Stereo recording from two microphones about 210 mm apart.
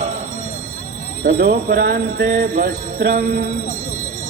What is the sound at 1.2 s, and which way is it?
Jingle bell, 45° right (ahead or behind).